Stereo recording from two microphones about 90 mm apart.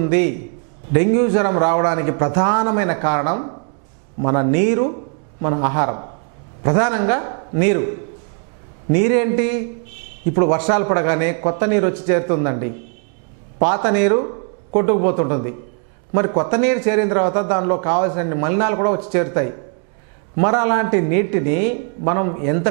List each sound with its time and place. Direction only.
0.0 s a man's voice: 15° right (ahead or behind)